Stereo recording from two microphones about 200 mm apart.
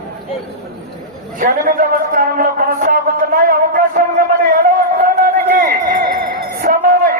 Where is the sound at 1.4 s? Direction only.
45° right (ahead or behind).